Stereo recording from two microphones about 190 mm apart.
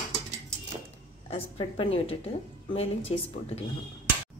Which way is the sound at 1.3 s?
30° left (ahead or behind).